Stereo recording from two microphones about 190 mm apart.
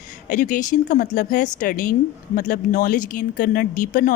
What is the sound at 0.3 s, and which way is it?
A woman's voice, 45° left (ahead or behind).